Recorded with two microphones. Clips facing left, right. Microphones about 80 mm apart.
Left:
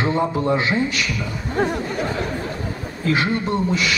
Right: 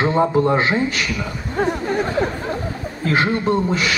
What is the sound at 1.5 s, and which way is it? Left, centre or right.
Snicker, centre.